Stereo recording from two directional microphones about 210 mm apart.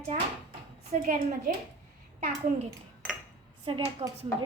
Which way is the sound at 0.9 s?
35° right (ahead or behind).